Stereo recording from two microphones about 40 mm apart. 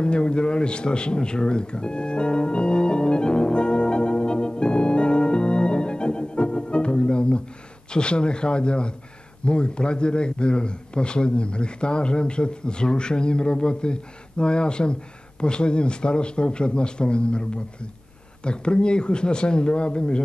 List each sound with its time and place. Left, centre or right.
0.0 s music: left
7.9 s a man's voice: left